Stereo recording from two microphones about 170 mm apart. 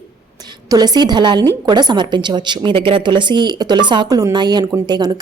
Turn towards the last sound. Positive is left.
turn(degrees=-25)  # may be behind; listen again after turning